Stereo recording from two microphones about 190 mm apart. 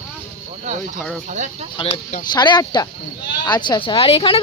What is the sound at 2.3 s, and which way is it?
A woman's voice, 25° left (ahead or behind).